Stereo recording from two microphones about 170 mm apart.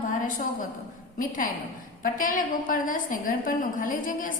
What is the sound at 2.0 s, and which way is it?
A woman's voice, 55° left (ahead or behind).